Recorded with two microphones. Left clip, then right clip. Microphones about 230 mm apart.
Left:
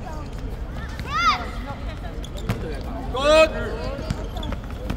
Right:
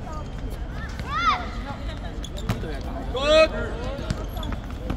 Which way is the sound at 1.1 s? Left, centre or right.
Left.